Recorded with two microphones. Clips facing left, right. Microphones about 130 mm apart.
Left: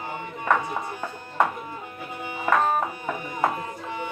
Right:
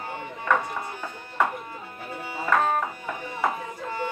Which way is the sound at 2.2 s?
15° left (ahead or behind).